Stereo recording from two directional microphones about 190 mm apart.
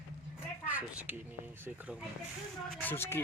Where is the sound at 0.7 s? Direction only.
10° right (ahead or behind).